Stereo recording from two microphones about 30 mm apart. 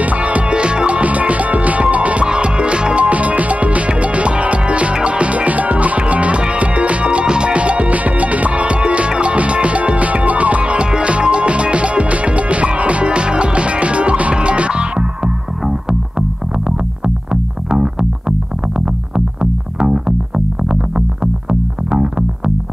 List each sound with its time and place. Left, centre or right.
0.0 s music: right
0.5 s music: right
1.0 s music: right
2.2 s music: right
3.1 s music: right
7.2 s music: right
7.5 s music: right
19.8 s music: right